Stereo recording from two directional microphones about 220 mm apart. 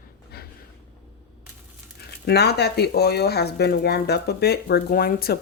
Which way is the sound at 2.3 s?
50° left (ahead or behind).